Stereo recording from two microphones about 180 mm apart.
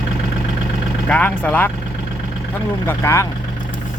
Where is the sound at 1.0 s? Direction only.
10° left (ahead or behind).